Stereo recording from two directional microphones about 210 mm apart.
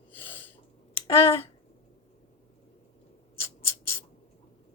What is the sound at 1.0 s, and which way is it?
Speech, 25° left (ahead or behind).